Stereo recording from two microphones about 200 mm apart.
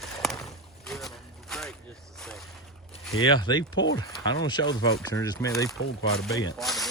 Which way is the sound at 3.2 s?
20° left (ahead or behind).